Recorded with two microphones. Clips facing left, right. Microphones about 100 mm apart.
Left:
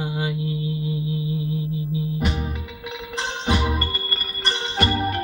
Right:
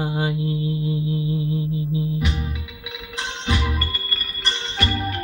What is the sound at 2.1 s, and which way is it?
Music, 50° left (ahead or behind).